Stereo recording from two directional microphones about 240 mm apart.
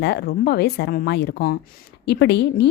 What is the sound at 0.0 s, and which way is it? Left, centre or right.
A woman's voice, left.